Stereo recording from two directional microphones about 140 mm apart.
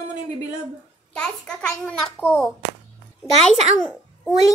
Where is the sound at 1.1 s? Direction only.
5° left (ahead or behind).